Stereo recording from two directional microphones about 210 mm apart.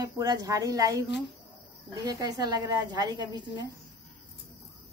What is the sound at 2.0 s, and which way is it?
A woman's voice, 20° right (ahead or behind).